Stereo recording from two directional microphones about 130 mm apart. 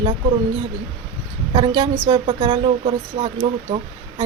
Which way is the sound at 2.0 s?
40° right (ahead or behind).